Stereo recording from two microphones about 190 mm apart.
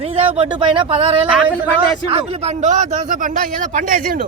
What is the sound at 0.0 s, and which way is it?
A man's voice, 30° right (ahead or behind).